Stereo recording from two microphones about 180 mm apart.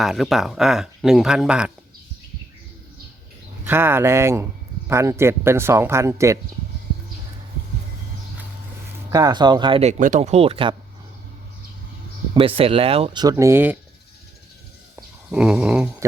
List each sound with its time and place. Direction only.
0.0 s speech: centre (ahead or behind)
3.6 s speech: 10° right (ahead or behind)
9.0 s speech: 20° right (ahead or behind)
10.0 s speech: 40° right (ahead or behind)
12.3 s speech: 30° right (ahead or behind)
13.2 s speech: 15° right (ahead or behind)
14.9 s snoring: 5° right (ahead or behind)